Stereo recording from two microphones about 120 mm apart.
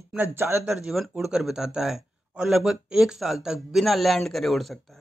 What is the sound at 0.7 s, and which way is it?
A man's voice, 5° right (ahead or behind).